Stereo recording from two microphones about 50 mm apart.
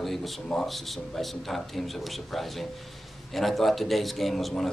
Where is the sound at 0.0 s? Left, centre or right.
Centre.